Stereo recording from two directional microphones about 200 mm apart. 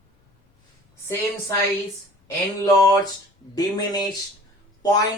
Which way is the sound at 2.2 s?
15° left (ahead or behind).